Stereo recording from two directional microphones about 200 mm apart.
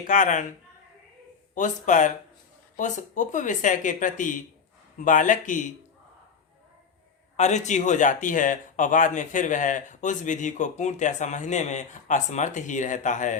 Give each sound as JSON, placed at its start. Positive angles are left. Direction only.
{"t": 0.0, "sound": "speech", "side_deg": 40}
{"t": 1.5, "sound": "speech", "side_deg": 40}
{"t": 7.3, "sound": "speech", "side_deg": 35}